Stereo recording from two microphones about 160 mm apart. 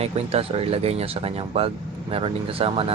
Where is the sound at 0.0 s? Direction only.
40° right (ahead or behind).